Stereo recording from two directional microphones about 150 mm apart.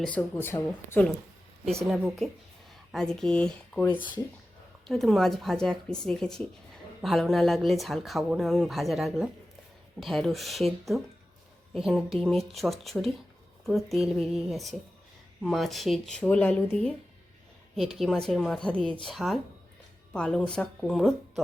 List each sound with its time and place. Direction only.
0.2 s speech: 15° left (ahead or behind)
1.8 s speech: centre (ahead or behind)
17.9 s speech: centre (ahead or behind)